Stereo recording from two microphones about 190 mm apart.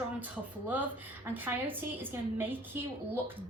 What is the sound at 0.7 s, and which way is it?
A woman's voice, 10° right (ahead or behind).